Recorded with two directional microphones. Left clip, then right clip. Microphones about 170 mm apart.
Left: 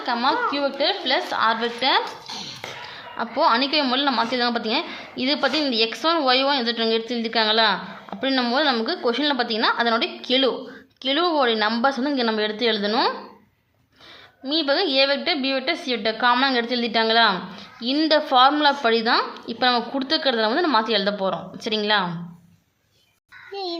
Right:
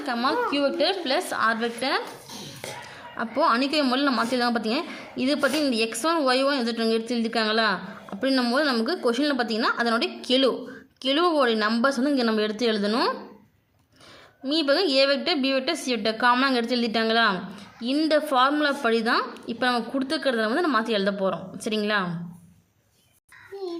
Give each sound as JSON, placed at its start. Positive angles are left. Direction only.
{"t": 0.0, "sound": "a woman's voice", "side_deg": -15}
{"t": 14.4, "sound": "a woman's voice", "side_deg": -20}